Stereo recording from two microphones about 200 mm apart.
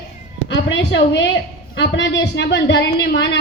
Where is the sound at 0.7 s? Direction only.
65° left (ahead or behind).